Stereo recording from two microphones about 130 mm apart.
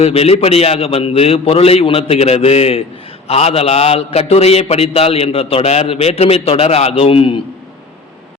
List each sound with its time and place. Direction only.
0.0 s a man's voice: 50° left (ahead or behind)